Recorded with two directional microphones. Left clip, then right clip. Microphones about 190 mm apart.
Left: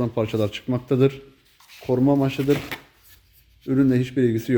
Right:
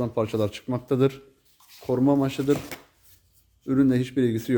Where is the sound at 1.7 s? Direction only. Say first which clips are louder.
Left 3 dB; centre (ahead or behind).